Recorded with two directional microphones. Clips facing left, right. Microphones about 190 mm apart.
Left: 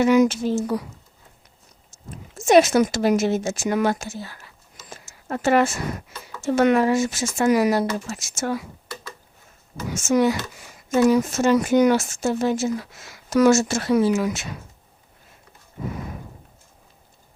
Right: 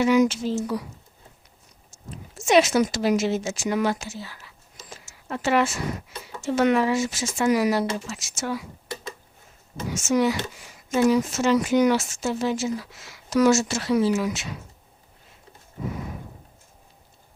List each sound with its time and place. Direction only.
0.0 s speech: 50° left (ahead or behind)
2.0 s speech: 50° left (ahead or behind)
4.9 s a sound: 50° left (ahead or behind)
6.4 s speech: 50° left (ahead or behind)
9.9 s speech: 50° left (ahead or behind)